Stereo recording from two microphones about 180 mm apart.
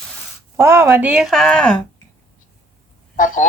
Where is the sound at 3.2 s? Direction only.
45° left (ahead or behind).